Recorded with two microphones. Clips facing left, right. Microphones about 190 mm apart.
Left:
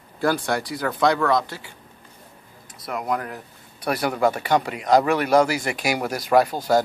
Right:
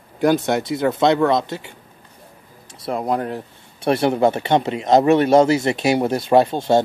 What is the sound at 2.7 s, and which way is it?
Speech, 30° right (ahead or behind).